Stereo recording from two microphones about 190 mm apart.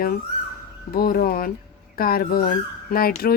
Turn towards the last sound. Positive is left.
turn(degrees=55)  # may be behind; listen again after turning